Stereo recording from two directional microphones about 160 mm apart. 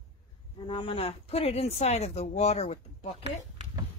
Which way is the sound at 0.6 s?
35° left (ahead or behind).